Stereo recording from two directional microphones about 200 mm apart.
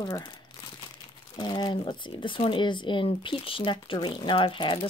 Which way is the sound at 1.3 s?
20° left (ahead or behind).